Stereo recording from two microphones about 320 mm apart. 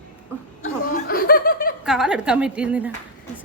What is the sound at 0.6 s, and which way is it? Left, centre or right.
Speech, left.